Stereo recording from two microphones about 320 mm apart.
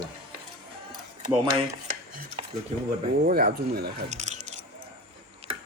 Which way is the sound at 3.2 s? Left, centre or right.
Right.